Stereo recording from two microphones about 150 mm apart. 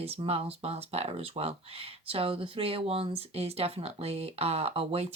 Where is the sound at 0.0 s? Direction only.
40° right (ahead or behind).